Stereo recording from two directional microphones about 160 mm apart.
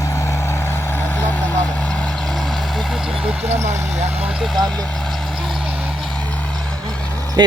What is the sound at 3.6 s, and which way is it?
Vehicle, 15° right (ahead or behind).